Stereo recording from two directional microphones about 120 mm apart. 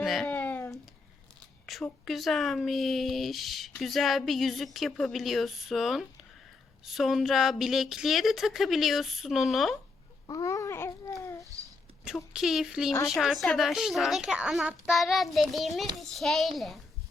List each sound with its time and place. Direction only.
0.0 s speech: centre (ahead or behind)
0.3 s cat: 15° left (ahead or behind)
1.6 s speech: centre (ahead or behind)
10.2 s babbling: 30° left (ahead or behind)
12.0 s speech: 5° right (ahead or behind)